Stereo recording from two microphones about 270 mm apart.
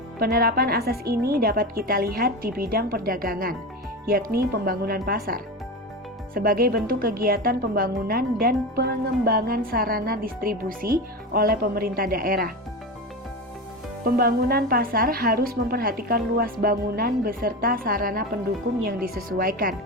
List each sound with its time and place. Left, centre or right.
0.2 s speech: right
14.0 s speech: right